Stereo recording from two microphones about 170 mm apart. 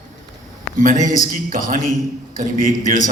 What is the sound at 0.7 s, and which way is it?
Speech, 50° right (ahead or behind).